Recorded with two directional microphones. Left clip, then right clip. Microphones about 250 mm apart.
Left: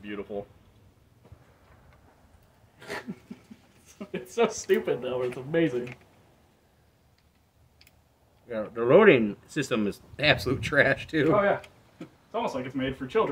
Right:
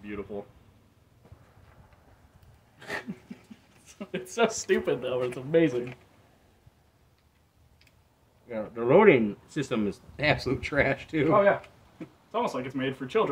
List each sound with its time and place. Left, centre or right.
0.0 s speech: centre
2.8 s a sound: right
3.8 s a sound: right
4.3 s speech: right
8.5 s speech: centre
12.3 s speech: right